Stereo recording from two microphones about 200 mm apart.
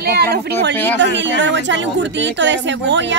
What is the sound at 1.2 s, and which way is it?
Speech, 65° right (ahead or behind).